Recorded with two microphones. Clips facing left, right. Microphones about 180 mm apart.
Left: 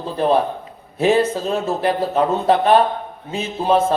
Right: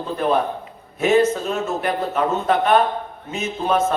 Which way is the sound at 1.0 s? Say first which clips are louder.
Even; 30° left (ahead or behind).